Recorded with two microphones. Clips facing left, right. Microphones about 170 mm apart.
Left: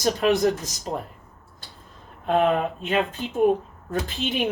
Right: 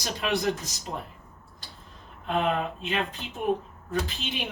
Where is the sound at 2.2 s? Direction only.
45° left (ahead or behind).